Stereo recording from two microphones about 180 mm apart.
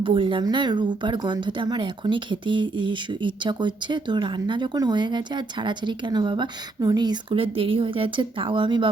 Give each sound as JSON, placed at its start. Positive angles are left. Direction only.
{"t": 0.0, "sound": "speech", "side_deg": -30}